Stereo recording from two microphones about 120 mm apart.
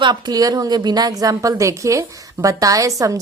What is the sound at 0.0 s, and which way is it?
A woman's voice, 35° right (ahead or behind).